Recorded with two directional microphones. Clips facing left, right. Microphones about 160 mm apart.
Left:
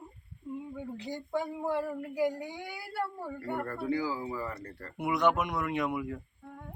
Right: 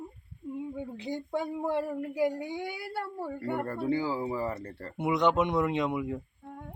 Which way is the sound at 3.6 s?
30° right (ahead or behind).